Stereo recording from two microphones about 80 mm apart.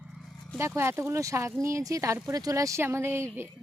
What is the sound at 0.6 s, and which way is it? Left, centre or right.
Speech, right.